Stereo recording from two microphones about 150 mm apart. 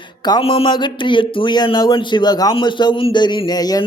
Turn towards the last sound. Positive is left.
turn(degrees=25)  # may be behind; listen again after turning